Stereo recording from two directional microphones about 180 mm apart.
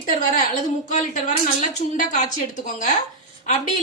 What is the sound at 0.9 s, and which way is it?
A woman's voice, 45° left (ahead or behind).